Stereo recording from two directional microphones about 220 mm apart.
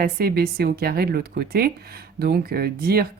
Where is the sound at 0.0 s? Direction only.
45° right (ahead or behind).